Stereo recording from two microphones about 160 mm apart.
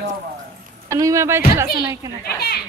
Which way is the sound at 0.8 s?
20° right (ahead or behind).